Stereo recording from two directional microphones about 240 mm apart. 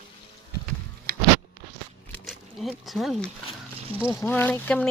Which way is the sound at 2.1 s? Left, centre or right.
Centre.